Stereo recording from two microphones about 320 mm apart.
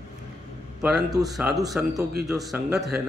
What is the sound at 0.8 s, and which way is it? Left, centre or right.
A man's voice, centre.